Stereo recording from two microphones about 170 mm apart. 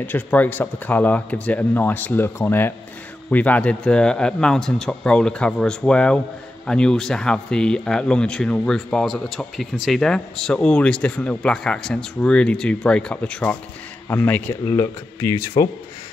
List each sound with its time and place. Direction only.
0.0 s speech: 10° left (ahead or behind)